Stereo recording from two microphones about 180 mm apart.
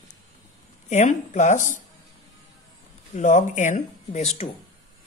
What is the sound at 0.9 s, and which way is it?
Speech, 40° left (ahead or behind).